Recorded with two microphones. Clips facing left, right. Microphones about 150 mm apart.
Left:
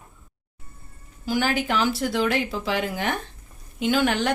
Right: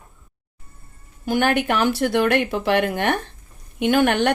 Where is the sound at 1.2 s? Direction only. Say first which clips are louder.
Right 4 dB; 55° right (ahead or behind).